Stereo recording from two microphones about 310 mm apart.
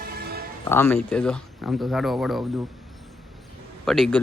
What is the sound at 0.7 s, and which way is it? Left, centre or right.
A man's voice, centre.